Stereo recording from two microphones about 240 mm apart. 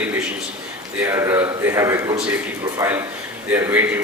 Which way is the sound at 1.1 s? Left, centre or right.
Centre.